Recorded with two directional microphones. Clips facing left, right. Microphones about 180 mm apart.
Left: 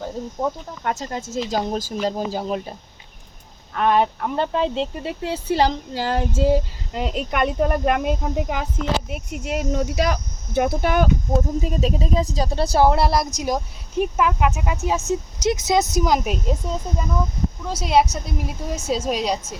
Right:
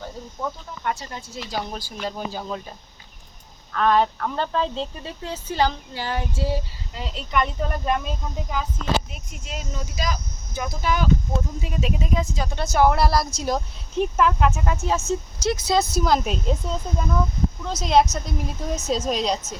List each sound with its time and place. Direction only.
0.9 s speech: 45° left (ahead or behind)
3.7 s speech: 15° left (ahead or behind)
5.5 s speech: 35° left (ahead or behind)
6.9 s speech: 55° left (ahead or behind); by 19.4 s 10° left (ahead or behind)